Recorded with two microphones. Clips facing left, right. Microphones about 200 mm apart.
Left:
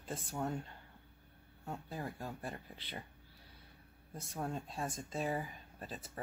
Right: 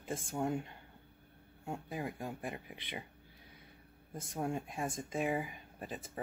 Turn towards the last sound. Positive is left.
turn(degrees=-15)  # may be behind; listen again after turning